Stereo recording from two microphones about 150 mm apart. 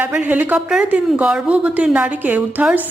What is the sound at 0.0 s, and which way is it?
Speech, 10° right (ahead or behind).